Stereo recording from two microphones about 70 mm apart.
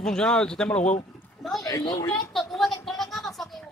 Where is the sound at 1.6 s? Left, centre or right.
Left.